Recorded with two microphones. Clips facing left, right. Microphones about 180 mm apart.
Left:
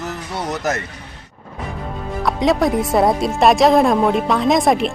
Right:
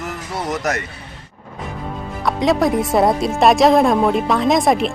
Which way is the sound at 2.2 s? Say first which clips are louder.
Even; centre (ahead or behind).